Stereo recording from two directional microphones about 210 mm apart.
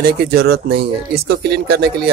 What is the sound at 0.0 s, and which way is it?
Speech, 45° right (ahead or behind).